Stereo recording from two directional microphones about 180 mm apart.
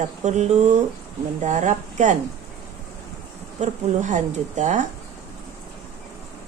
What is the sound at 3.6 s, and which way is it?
Speech, 40° right (ahead or behind).